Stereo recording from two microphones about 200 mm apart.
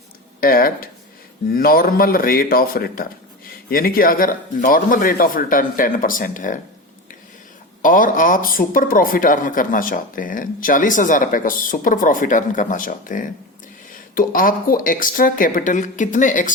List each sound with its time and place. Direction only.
0.3 s speech: 45° left (ahead or behind)
7.8 s speech: 40° left (ahead or behind)